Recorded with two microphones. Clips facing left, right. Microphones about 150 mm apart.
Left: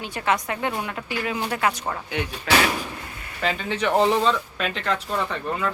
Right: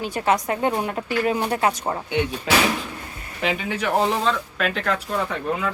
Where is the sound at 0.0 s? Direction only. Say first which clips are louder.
Right 3 dB; 40° right (ahead or behind).